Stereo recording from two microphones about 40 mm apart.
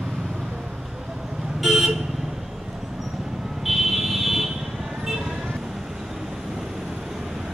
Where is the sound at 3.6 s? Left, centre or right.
Centre.